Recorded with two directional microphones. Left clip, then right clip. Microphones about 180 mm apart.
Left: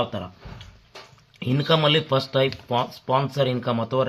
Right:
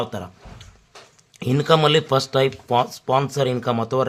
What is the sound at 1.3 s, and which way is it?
Speech, 30° right (ahead or behind).